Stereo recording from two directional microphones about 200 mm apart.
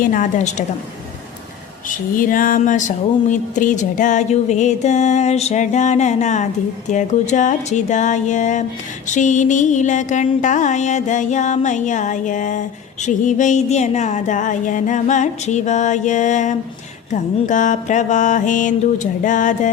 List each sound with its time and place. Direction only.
0.0 s music: 40° left (ahead or behind)
1.9 s music: 40° left (ahead or behind)